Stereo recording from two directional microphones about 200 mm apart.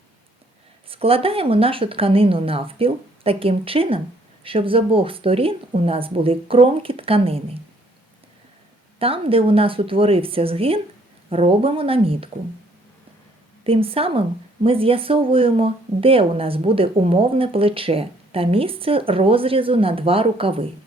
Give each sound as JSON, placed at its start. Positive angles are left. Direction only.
{"t": 0.9, "sound": "speech", "side_deg": -30}
{"t": 9.0, "sound": "speech", "side_deg": -30}
{"t": 13.7, "sound": "speech", "side_deg": -30}